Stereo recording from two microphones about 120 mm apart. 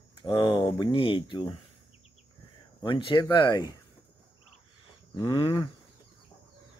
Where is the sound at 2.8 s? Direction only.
45° left (ahead or behind).